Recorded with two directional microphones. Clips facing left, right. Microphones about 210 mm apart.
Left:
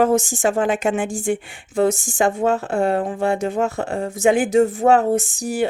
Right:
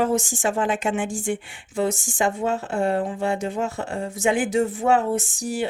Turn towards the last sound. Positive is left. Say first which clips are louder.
# left 4 dB
turn(degrees=45)  # may be behind; listen again after turning